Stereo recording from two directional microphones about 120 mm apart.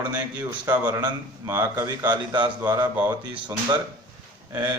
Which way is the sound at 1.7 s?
35° right (ahead or behind).